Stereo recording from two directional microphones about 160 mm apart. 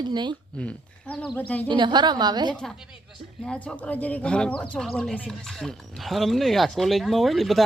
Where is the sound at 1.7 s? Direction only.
30° right (ahead or behind).